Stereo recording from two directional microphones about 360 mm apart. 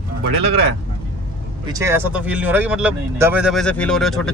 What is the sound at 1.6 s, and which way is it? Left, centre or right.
Speech, centre.